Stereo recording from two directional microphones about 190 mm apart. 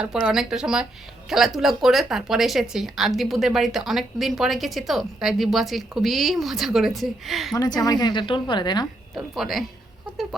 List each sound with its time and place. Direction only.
0.0 s a woman's voice: 5° right (ahead or behind)
7.5 s speech: 20° left (ahead or behind)
9.1 s a woman's voice: centre (ahead or behind)